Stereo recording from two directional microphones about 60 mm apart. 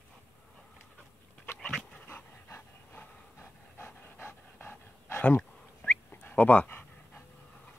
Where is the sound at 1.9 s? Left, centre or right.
Left.